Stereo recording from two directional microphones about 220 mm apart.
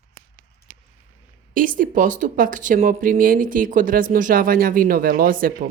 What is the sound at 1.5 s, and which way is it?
Speech, 40° right (ahead or behind).